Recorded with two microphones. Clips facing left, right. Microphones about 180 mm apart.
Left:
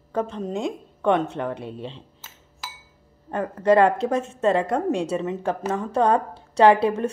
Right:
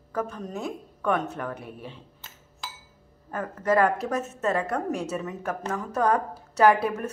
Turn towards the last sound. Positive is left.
turn(degrees=30)  # may be behind; listen again after turning